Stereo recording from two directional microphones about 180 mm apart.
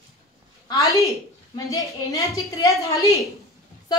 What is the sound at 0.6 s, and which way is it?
A woman's voice, 20° left (ahead or behind).